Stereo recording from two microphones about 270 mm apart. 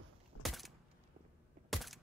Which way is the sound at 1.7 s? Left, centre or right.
Centre.